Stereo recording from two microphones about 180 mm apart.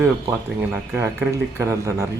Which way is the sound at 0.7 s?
15° right (ahead or behind).